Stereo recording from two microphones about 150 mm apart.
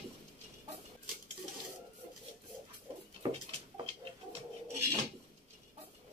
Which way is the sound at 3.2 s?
30° right (ahead or behind).